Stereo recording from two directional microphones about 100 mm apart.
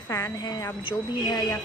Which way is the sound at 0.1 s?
35° left (ahead or behind).